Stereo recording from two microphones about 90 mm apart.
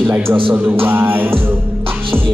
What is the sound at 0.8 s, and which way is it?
Music, 25° right (ahead or behind).